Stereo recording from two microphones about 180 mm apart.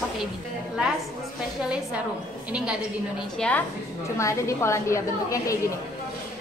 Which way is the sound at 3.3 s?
5° left (ahead or behind).